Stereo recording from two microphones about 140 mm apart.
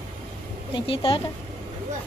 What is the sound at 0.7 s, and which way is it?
Speech, 40° left (ahead or behind).